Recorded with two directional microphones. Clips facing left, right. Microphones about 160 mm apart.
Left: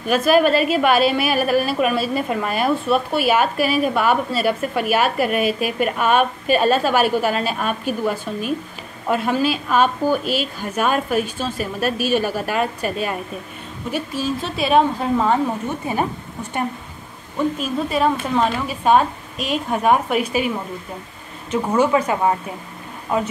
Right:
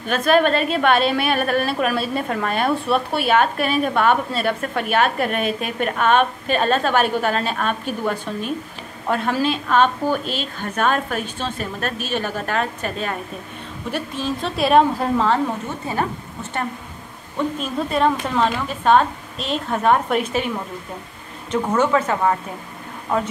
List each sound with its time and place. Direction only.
0.1 s a woman's voice: 5° left (ahead or behind)
15.8 s a woman's voice: 15° left (ahead or behind)
17.6 s a woman's voice: 5° left (ahead or behind)